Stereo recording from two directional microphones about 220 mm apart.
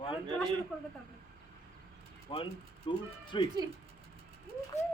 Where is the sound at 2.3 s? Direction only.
20° left (ahead or behind).